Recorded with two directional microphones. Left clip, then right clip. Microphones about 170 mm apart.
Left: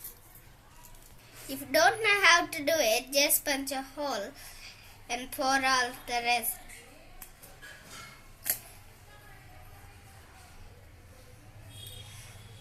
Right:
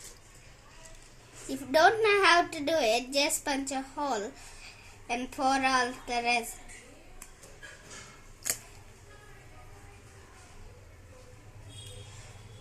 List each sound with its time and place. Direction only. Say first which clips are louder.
1.5 s a woman's voice: right 2 dB; 45° right (ahead or behind)